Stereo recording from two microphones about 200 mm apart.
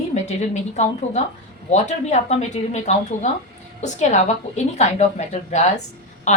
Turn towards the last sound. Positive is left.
turn(degrees=35)  # may be behind; listen again after turning